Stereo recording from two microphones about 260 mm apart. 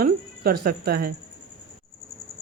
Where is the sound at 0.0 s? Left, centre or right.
Right.